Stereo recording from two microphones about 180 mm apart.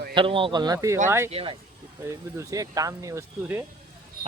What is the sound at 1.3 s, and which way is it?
Speech, 30° right (ahead or behind).